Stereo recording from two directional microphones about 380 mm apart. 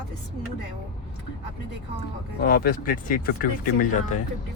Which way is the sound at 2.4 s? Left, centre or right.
Left.